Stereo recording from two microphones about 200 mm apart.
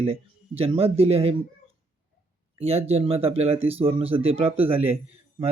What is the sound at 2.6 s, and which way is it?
Speech, 30° right (ahead or behind).